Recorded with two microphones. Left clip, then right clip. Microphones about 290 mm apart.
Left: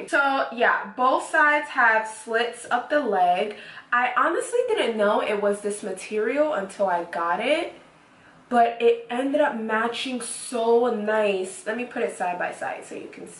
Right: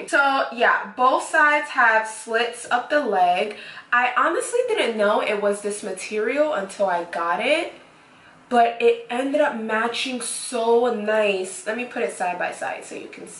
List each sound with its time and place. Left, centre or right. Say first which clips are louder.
0.1 s a woman's voice: right 3 dB; centre